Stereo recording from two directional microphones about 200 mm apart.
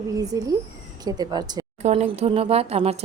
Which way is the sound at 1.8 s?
30° right (ahead or behind).